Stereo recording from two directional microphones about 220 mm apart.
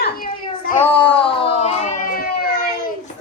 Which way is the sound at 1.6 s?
35° left (ahead or behind).